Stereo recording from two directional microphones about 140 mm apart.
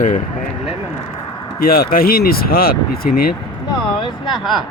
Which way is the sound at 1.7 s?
90° left.